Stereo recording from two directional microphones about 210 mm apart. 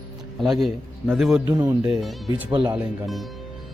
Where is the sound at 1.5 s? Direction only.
15° right (ahead or behind).